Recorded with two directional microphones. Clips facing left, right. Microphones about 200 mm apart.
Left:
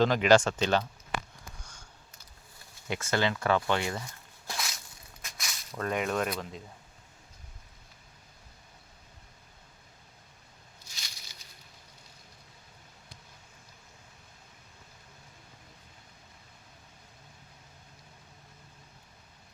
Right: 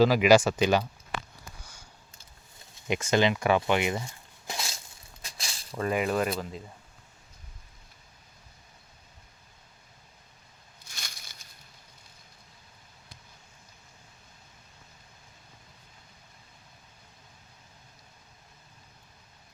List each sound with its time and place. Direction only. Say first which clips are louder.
0.0 s speech: right 3 dB; 10° right (ahead or behind)
2.8 s speech: right 5 dB; 15° right (ahead or behind)
5.2 s snake: right 1 dB; 30° right (ahead or behind)
5.7 s speech: right 3 dB; 5° right (ahead or behind)
10.8 s a sound: right 5 dB; 55° right (ahead or behind)